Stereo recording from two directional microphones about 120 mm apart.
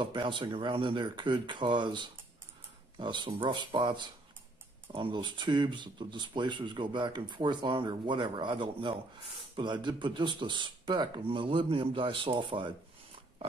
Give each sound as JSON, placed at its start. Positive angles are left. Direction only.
{"t": 0.0, "sound": "speech", "side_deg": -40}